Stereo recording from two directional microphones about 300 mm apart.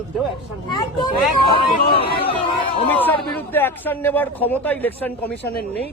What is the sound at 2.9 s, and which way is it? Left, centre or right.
A man's voice, centre.